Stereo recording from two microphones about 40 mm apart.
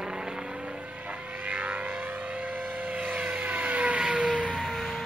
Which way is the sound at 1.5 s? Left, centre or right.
Right.